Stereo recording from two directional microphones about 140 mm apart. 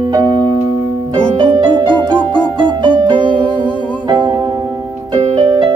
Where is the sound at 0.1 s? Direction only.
30° right (ahead or behind).